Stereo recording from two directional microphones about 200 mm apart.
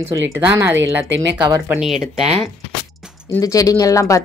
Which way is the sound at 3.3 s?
15° left (ahead or behind).